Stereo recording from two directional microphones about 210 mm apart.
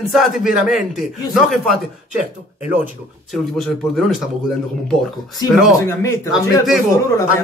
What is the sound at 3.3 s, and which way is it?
A man's voice, centre (ahead or behind).